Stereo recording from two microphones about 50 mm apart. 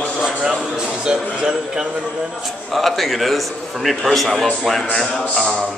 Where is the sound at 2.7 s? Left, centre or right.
Centre.